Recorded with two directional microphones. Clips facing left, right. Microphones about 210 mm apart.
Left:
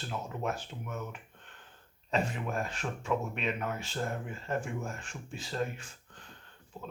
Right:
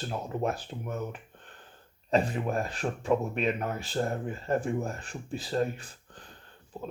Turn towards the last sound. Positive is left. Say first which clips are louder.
# right 6 dB
turn(degrees=-35)  # may be behind; listen again after turning